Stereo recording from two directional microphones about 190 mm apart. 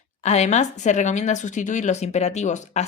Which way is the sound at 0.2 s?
35° left (ahead or behind).